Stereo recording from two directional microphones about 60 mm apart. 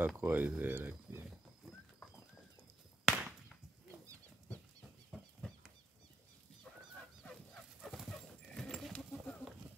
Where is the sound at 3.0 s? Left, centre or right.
Centre.